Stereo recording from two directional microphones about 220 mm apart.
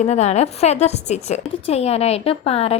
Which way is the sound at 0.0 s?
30° left (ahead or behind).